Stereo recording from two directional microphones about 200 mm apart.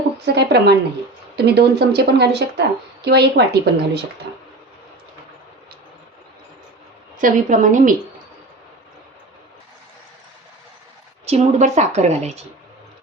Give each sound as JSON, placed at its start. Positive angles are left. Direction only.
{"t": 0.3, "sound": "a woman's voice", "side_deg": -55}
{"t": 4.3, "sound": "a sound", "side_deg": -55}
{"t": 7.2, "sound": "a woman's voice", "side_deg": -40}
{"t": 11.3, "sound": "a woman's voice", "side_deg": -35}